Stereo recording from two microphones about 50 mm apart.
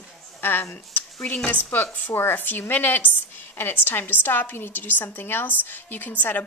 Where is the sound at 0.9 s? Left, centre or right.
Left.